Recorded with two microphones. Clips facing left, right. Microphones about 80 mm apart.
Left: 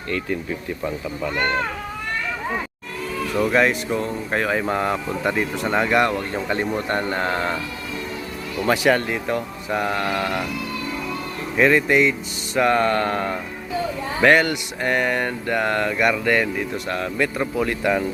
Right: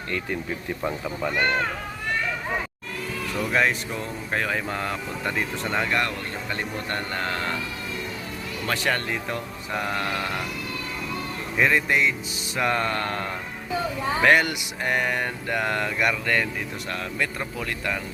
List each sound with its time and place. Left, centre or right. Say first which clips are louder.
3.4 s speech: left 4 dB; centre
8.6 s speech: left 8 dB; centre
11.5 s speech: left 5 dB; centre
17.4 s speech: left 8 dB; centre